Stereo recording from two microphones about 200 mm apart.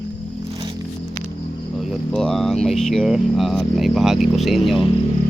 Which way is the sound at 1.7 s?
Centre (ahead or behind).